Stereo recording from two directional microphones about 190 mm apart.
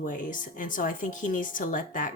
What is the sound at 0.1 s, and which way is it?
Speech, 45° left (ahead or behind).